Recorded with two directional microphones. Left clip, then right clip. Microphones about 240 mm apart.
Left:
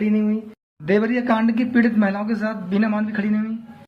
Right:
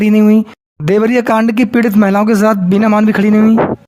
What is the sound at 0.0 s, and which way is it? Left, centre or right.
Speech, right.